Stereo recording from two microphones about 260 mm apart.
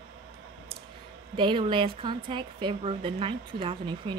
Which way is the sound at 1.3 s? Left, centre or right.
Centre.